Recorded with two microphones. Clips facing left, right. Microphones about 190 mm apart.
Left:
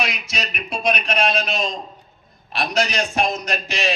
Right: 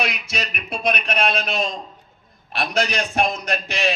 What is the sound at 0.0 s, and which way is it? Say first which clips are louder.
A man's voice: even; 55° right (ahead or behind).